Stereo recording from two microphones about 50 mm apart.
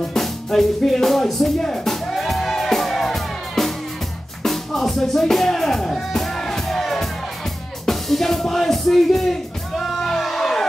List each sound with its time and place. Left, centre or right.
0.1 s music: centre